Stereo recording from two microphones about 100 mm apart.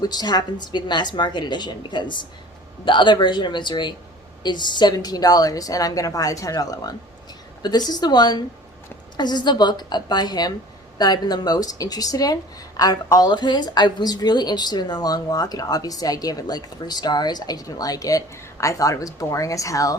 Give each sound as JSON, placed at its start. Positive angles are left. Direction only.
{"t": 0.0, "sound": "a woman's voice", "side_deg": 45}